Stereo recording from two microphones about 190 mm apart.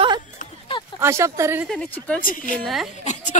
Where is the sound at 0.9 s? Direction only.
15° right (ahead or behind).